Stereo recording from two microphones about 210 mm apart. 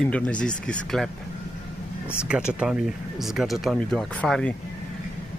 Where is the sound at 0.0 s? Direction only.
5° left (ahead or behind).